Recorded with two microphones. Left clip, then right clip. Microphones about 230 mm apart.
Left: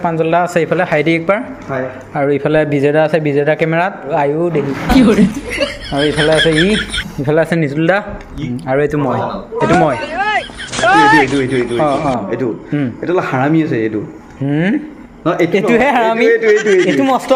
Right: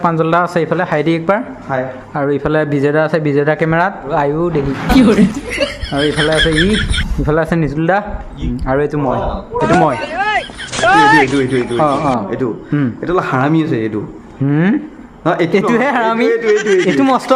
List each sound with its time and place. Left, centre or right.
0.0 s a man's voice: centre
4.9 s speech: centre
12.3 s a man's voice: centre
16.5 s speech: centre